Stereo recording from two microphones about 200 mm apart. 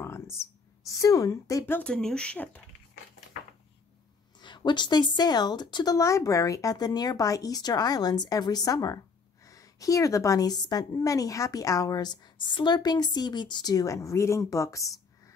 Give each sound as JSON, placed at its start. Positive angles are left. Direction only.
{"t": 0.8, "sound": "speech", "side_deg": 15}
{"t": 4.4, "sound": "speech", "side_deg": 20}